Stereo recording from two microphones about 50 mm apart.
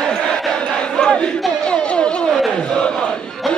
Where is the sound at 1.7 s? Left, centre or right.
Centre.